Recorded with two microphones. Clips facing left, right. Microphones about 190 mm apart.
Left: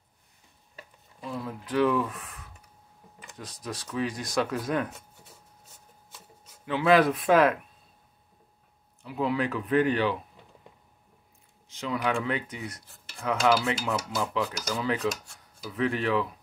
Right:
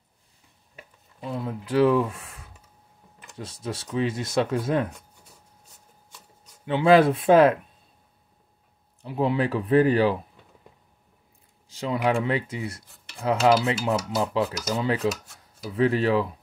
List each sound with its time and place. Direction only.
1.2 s speech: 25° right (ahead or behind)
6.0 s chopping: 5° left (ahead or behind)
6.6 s speech: 25° right (ahead or behind)
9.0 s cutlery: 30° right (ahead or behind)
11.7 s speech: 35° right (ahead or behind)
13.2 s cutlery: 30° right (ahead or behind)